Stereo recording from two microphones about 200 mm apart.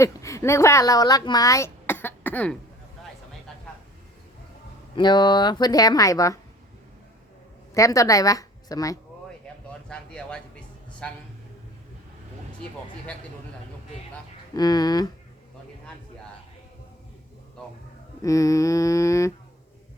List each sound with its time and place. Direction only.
0.0 s a woman's voice: 15° left (ahead or behind)
4.9 s speech: 20° left (ahead or behind)
7.7 s a woman's voice: 15° left (ahead or behind)
9.9 s speech: 5° left (ahead or behind)
14.5 s speech: 20° left (ahead or behind)
18.2 s mantra: 15° left (ahead or behind)